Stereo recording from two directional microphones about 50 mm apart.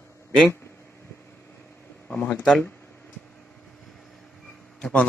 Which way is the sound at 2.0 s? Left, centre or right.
Left.